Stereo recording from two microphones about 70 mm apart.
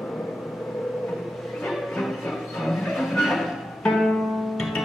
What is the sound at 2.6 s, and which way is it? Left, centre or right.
Music, centre.